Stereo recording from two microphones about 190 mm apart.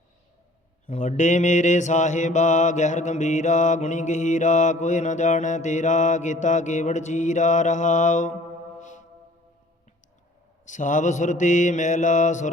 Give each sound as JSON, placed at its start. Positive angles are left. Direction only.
{"t": 0.9, "sound": "mantra", "side_deg": 40}
{"t": 10.7, "sound": "mantra", "side_deg": 40}